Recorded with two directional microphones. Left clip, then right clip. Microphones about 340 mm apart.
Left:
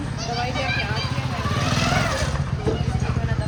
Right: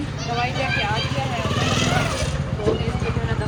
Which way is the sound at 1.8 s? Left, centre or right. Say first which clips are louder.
Even; centre.